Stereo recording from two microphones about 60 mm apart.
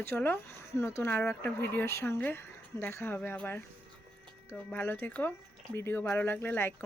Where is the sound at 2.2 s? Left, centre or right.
Left.